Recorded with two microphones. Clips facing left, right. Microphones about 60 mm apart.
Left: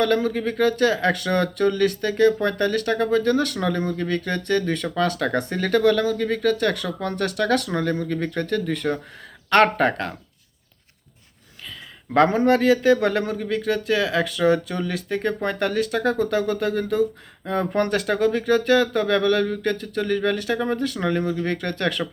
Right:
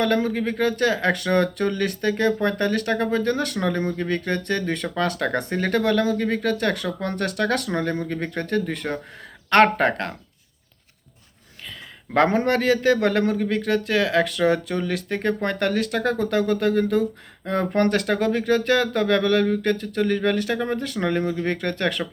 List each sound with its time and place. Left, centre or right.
0.0 s speech: right
12.1 s a man's voice: right